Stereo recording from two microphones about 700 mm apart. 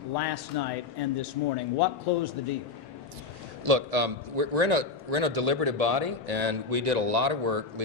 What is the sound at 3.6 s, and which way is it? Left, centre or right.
A man's voice, right.